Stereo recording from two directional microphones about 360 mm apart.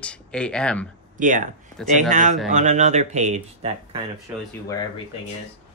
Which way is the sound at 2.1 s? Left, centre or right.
Right.